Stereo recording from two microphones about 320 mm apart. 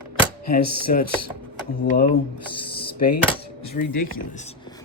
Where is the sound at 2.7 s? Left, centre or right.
Left.